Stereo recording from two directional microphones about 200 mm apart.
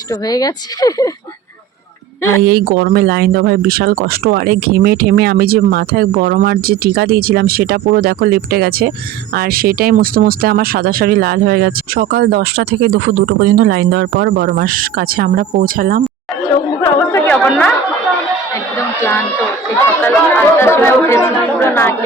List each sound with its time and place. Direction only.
0.1 s speech: 20° left (ahead or behind)
2.4 s speech: 50° right (ahead or behind)
16.8 s a woman's voice: 15° left (ahead or behind)
20.0 s speech: 10° left (ahead or behind)